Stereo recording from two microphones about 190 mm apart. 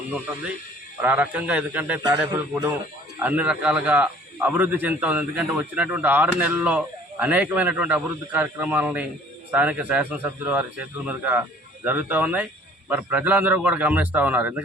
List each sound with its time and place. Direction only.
1.0 s a man's voice: 10° right (ahead or behind)
2.0 s a man's voice: 20° right (ahead or behind)
3.2 s a man's voice: 10° right (ahead or behind)